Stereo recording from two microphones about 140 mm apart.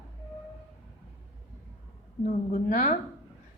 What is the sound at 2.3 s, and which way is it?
Speech, 65° left (ahead or behind).